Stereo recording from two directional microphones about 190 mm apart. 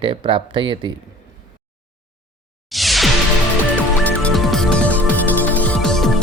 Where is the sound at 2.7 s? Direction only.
Centre (ahead or behind).